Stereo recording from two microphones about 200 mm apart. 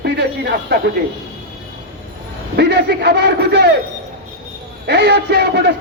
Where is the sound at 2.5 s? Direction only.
55° right (ahead or behind).